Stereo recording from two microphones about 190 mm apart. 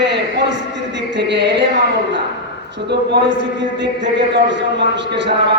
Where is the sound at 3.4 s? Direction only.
70° right (ahead or behind).